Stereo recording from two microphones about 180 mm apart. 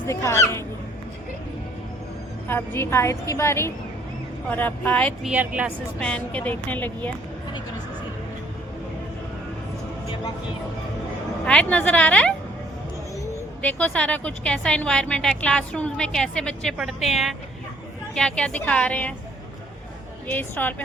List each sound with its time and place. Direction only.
0.1 s a woman's voice: 15° left (ahead or behind)
2.5 s a woman's voice: 10° left (ahead or behind)
5.3 s speech: 5° right (ahead or behind)
6.0 s a woman's voice: 5° left (ahead or behind)
11.4 s a woman's voice: 5° left (ahead or behind)
13.6 s a woman's voice: 10° left (ahead or behind)
20.2 s a woman's voice: 10° left (ahead or behind)